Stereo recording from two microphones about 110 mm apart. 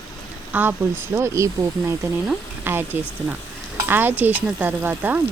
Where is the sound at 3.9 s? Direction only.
20° right (ahead or behind).